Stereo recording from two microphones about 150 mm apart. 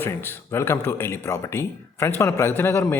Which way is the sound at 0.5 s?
15° left (ahead or behind).